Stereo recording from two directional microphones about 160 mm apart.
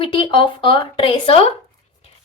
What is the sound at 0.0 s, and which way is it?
A woman's voice, 35° left (ahead or behind).